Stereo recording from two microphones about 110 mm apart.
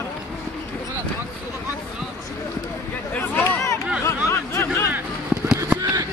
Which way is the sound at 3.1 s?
15° left (ahead or behind).